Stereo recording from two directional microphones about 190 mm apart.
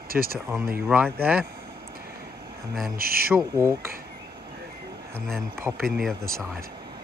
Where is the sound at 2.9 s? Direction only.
50° right (ahead or behind).